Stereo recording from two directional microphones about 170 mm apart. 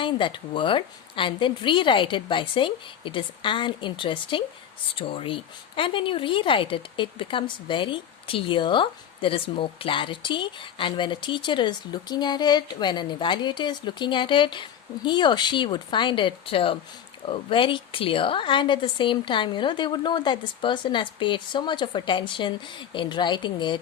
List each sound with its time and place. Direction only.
0.0 s a woman's voice: 30° left (ahead or behind)